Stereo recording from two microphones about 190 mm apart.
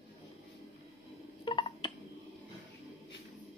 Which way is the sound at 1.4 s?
25° left (ahead or behind).